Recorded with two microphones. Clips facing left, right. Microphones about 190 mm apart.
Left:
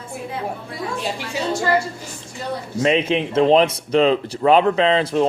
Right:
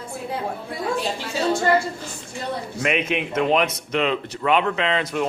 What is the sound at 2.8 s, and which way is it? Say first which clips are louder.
Speech: left 6 dB; 30° left (ahead or behind).